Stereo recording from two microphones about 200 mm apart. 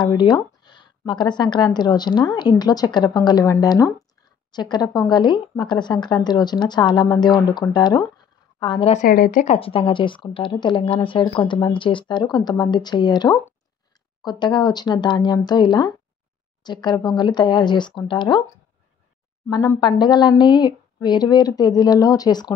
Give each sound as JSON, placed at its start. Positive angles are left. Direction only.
{"t": 0.0, "sound": "speech", "side_deg": 20}
{"t": 9.0, "sound": "speech", "side_deg": 45}
{"t": 9.6, "sound": "speech", "side_deg": 25}
{"t": 19.5, "sound": "speech", "side_deg": 20}